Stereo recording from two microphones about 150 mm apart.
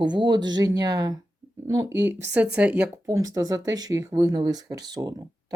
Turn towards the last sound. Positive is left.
turn(degrees=-25)  # may be behind; listen again after turning